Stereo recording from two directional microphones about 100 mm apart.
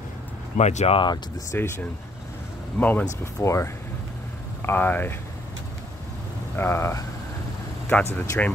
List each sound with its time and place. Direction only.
0.6 s speech: 90° left
1.5 s speech: 25° left (ahead or behind)
3.4 s speech: 30° left (ahead or behind)
6.5 s speech: 25° left (ahead or behind)